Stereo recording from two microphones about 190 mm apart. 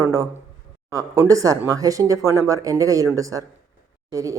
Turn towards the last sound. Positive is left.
turn(degrees=-15)  # may be behind; listen again after turning